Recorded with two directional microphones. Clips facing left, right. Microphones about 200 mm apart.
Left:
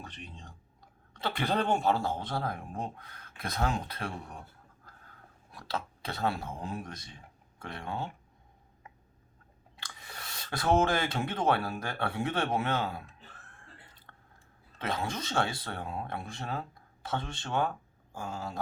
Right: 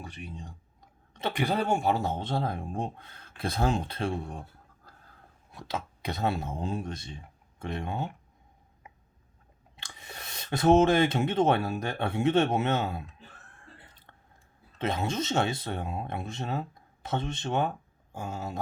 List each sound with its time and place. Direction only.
0.0 s speech: 10° right (ahead or behind); by 4.4 s 25° right (ahead or behind)
4.9 s a sound: 35° right (ahead or behind)
5.5 s speech: 20° right (ahead or behind)
9.7 s speech: 25° right (ahead or behind)
14.1 s chewing: 20° right (ahead or behind)
14.8 s speech: 25° right (ahead or behind)